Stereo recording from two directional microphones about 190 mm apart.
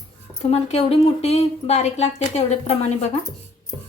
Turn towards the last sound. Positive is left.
turn(degrees=35)  # may be behind; listen again after turning